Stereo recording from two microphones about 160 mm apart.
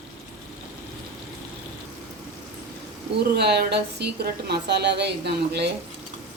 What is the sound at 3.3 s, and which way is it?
Speech, 90° right.